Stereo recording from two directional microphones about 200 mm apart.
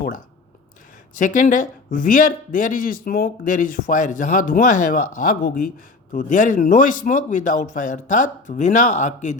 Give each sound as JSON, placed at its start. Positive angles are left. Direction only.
{"t": 1.2, "sound": "speech", "side_deg": 40}